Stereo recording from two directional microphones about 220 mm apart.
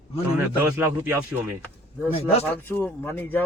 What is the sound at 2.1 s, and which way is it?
Speech, 25° left (ahead or behind).